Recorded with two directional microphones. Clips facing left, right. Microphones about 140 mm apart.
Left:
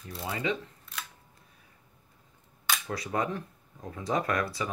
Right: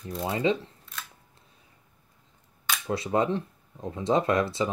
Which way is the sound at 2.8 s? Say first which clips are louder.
Right 7 dB; 25° right (ahead or behind).